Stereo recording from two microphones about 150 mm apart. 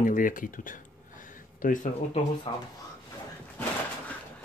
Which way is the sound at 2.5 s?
30° left (ahead or behind).